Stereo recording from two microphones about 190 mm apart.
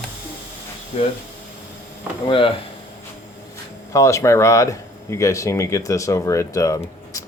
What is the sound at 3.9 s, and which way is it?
Speech, 15° left (ahead or behind).